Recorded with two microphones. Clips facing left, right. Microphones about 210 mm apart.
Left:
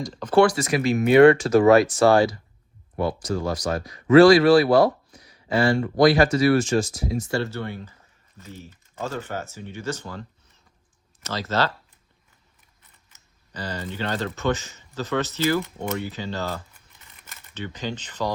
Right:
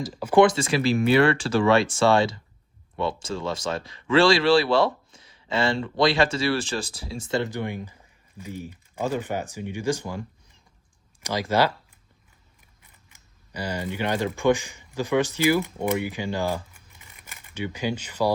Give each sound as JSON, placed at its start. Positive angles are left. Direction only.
{"t": 0.0, "sound": "speech", "side_deg": -5}
{"t": 0.3, "sound": "speech", "side_deg": -25}
{"t": 13.1, "sound": "speech", "side_deg": -10}
{"t": 17.0, "sound": "camera", "side_deg": -10}